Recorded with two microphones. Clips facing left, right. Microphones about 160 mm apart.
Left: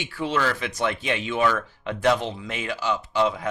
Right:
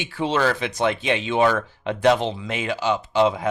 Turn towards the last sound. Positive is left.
turn(degrees=-20)  # may be behind; listen again after turning